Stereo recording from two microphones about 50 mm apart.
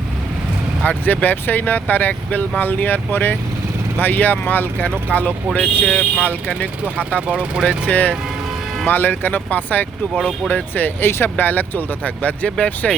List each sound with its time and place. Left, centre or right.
0.9 s speech: left
7.2 s speech: right
7.9 s speech: left
12.5 s speech: centre